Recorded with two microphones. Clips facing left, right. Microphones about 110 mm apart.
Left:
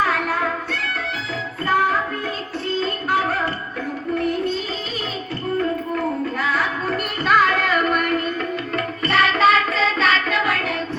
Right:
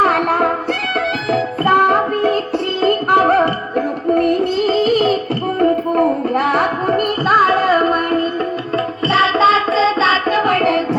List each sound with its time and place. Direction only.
0.0 s music: 60° right (ahead or behind)
5.5 s music: 55° right (ahead or behind)
7.3 s child singing: 35° right (ahead or behind)
8.7 s music: 30° right (ahead or behind); by 10.8 s 60° right (ahead or behind)